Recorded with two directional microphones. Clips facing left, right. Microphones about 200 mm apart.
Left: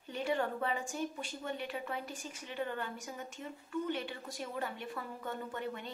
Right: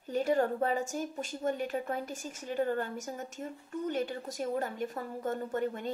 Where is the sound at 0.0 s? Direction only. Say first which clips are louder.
Right 6 dB; 40° right (ahead or behind).